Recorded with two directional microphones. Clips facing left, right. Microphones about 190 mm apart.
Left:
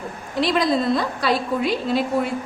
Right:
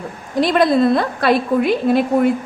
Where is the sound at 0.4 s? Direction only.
55° right (ahead or behind).